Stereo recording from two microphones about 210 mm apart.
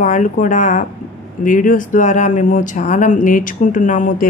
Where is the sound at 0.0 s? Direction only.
35° left (ahead or behind).